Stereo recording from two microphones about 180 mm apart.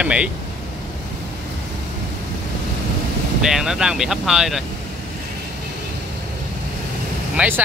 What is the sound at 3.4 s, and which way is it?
Speech, 5° right (ahead or behind).